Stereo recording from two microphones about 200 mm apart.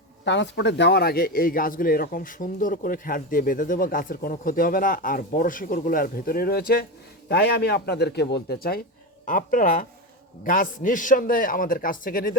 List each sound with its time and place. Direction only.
0.3 s speech: 60° left (ahead or behind); by 12.4 s 45° left (ahead or behind)